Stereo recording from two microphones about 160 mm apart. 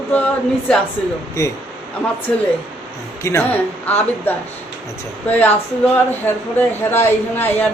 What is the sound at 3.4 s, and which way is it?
Speech, 10° left (ahead or behind).